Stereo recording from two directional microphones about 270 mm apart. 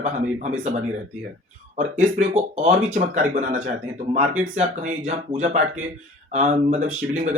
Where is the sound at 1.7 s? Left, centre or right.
Right.